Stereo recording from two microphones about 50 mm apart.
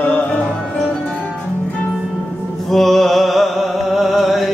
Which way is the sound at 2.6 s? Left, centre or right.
Centre.